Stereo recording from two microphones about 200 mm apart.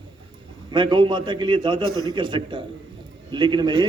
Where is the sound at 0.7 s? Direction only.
25° right (ahead or behind).